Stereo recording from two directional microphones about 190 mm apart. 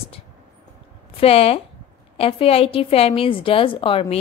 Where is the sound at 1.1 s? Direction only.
30° left (ahead or behind).